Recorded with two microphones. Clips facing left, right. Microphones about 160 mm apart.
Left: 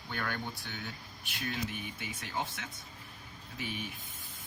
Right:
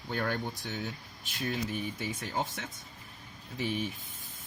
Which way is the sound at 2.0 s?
40° right (ahead or behind).